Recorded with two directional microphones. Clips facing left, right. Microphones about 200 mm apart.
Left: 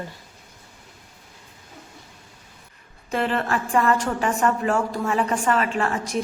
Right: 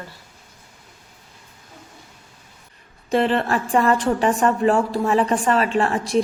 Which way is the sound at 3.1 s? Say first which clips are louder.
Right 5 dB; 35° right (ahead or behind).